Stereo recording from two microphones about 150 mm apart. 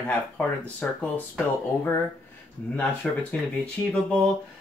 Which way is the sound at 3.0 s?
5° left (ahead or behind).